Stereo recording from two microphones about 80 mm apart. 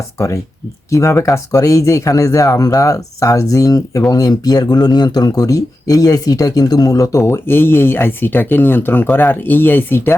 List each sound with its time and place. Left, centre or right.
0.9 s speech: left
7.2 s speech: left